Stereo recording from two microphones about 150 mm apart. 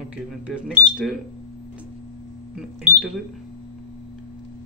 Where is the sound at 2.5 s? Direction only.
5° right (ahead or behind).